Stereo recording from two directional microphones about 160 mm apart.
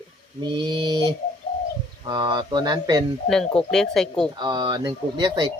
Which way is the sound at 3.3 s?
5° left (ahead or behind).